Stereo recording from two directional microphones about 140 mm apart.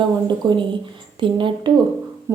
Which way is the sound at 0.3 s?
35° right (ahead or behind).